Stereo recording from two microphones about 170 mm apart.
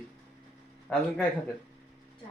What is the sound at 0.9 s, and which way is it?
Speech, 5° left (ahead or behind).